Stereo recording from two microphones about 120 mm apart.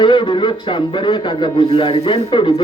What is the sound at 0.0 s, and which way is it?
A man's voice, 40° left (ahead or behind).